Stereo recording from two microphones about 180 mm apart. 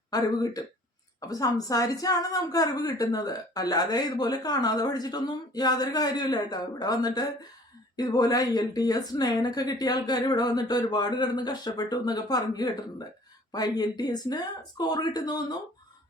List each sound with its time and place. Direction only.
0.1 s a woman's voice: 20° left (ahead or behind)